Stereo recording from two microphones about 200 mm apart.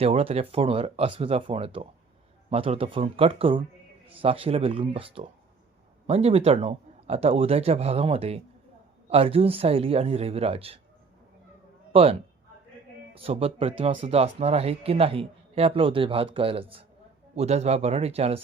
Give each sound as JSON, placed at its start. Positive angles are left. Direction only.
{"t": 0.0, "sound": "speech", "side_deg": -30}
{"t": 11.9, "sound": "a man's voice", "side_deg": -30}
{"t": 13.1, "sound": "speech", "side_deg": -30}